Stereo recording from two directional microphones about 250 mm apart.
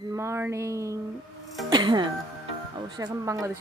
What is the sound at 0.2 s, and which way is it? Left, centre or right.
Speech, centre.